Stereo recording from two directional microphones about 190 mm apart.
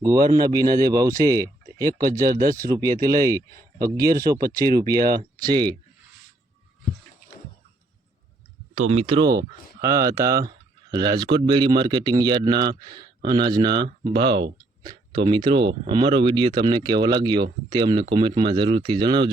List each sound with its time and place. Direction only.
0.0 s speech: 20° right (ahead or behind)
8.9 s speech: 30° right (ahead or behind)